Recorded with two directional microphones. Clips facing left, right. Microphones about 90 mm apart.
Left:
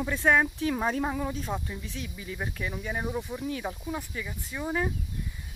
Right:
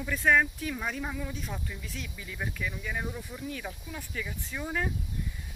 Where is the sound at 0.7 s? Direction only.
40° left (ahead or behind).